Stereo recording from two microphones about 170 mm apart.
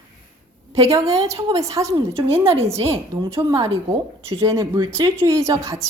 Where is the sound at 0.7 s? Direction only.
35° right (ahead or behind).